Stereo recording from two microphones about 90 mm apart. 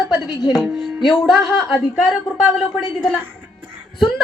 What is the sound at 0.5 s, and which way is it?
Music, 5° right (ahead or behind).